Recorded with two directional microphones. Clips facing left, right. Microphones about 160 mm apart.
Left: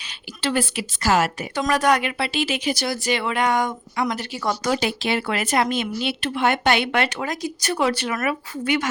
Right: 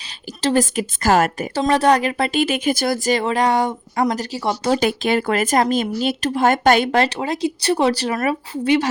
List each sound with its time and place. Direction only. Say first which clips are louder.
0.4 s a woman's voice: right 5 dB; 40° right (ahead or behind)
1.5 s speech: right 4 dB; 30° right (ahead or behind)
4.8 s speech: right 5 dB; 50° right (ahead or behind); by 8.9 s 30° right (ahead or behind)